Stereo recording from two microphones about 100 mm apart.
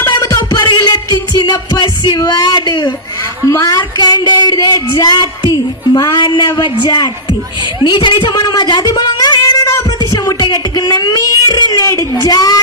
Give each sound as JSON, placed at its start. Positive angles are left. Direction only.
{"t": 0.1, "sound": "music", "side_deg": 40}
{"t": 3.5, "sound": "speech", "side_deg": 40}
{"t": 7.9, "sound": "a sound", "side_deg": 50}
{"t": 12.2, "sound": "speech", "side_deg": 40}